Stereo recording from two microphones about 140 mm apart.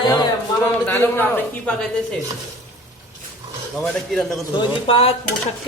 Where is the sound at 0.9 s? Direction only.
15° left (ahead or behind).